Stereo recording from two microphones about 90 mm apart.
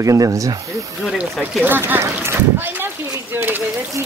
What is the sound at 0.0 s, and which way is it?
Speech, 40° right (ahead or behind).